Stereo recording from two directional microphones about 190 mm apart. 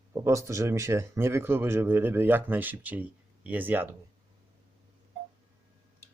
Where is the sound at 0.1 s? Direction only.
15° right (ahead or behind).